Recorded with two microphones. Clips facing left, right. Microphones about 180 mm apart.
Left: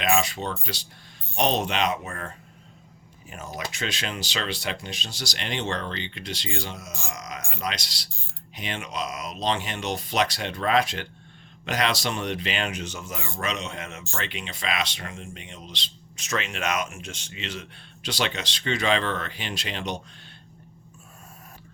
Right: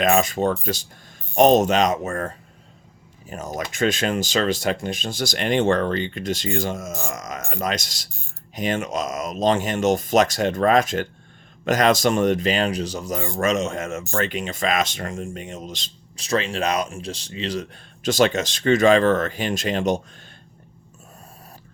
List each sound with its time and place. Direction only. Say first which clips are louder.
0.0 s speech: right 6 dB; 45° right (ahead or behind)
16.2 s speech: right 6 dB; 30° right (ahead or behind)